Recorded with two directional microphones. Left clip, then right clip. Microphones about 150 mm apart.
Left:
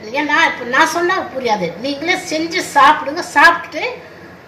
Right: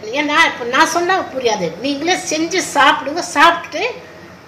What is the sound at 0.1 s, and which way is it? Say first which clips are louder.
A woman's voice: even; 90° right.